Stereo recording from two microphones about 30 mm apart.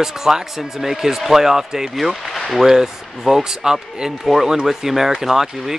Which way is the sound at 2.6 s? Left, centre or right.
Centre.